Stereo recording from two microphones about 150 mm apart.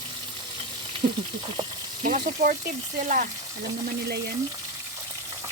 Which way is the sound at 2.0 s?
60° right (ahead or behind).